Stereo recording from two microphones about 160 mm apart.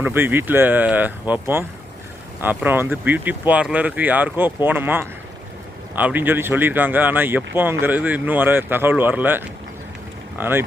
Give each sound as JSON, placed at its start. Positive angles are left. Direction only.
{"t": 0.0, "sound": "speech", "side_deg": -15}